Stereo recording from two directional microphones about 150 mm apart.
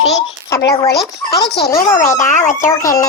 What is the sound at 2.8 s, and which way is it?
Speech, 20° left (ahead or behind).